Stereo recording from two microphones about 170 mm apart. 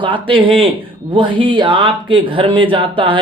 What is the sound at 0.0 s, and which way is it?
Speech, 30° right (ahead or behind).